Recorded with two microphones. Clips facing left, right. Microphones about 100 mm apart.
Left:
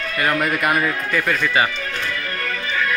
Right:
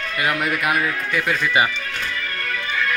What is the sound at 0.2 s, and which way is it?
A man's voice, 5° right (ahead or behind).